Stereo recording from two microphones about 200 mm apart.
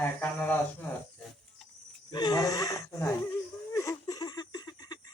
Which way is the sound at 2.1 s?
20° left (ahead or behind).